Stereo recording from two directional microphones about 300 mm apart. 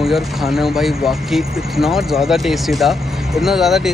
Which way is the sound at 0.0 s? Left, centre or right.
Centre.